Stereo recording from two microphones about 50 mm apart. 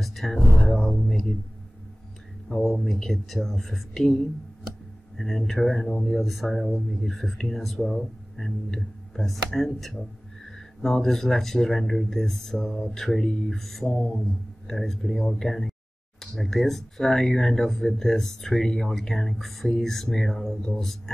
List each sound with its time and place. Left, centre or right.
0.0 s music: centre
2.6 s speech: centre
5.1 s speech: centre
6.0 s speech: centre